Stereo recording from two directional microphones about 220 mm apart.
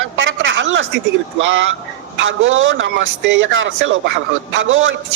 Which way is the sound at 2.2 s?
60° right (ahead or behind).